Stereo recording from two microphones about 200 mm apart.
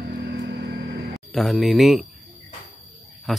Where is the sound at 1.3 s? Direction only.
Centre (ahead or behind).